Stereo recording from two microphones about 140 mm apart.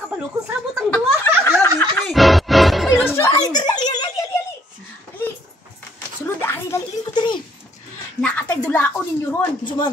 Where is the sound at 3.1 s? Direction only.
25° left (ahead or behind).